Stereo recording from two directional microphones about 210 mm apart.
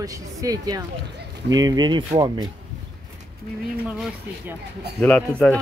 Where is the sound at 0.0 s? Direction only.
15° right (ahead or behind).